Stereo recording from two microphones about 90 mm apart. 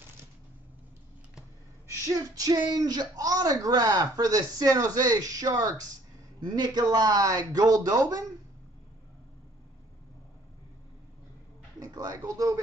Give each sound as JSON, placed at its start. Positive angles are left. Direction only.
{"t": 2.0, "sound": "speech", "side_deg": -45}
{"t": 11.8, "sound": "speech", "side_deg": -45}